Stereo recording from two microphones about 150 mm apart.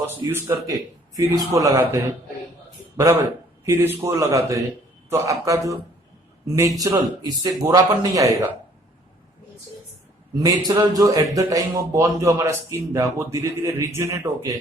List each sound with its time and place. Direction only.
0.2 s speech: 15° right (ahead or behind)
10.3 s speech: 25° right (ahead or behind)